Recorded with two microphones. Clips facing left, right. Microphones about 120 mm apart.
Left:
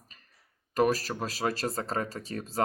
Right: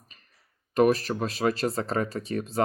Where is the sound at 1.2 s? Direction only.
40° left (ahead or behind).